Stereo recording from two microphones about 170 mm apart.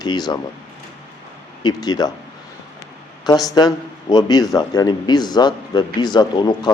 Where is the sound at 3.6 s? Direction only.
25° left (ahead or behind).